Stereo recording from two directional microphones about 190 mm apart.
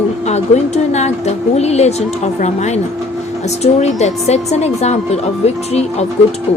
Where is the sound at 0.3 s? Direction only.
35° left (ahead or behind).